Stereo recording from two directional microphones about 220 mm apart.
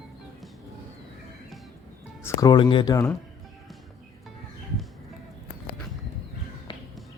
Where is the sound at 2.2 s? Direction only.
15° left (ahead or behind).